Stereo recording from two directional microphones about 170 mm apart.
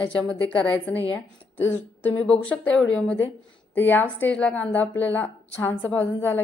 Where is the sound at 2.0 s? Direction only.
10° left (ahead or behind).